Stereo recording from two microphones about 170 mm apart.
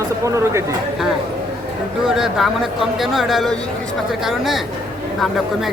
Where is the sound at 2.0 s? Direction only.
Centre (ahead or behind).